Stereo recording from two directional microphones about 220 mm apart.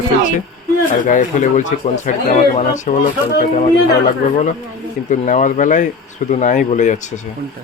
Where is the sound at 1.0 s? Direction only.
35° left (ahead or behind).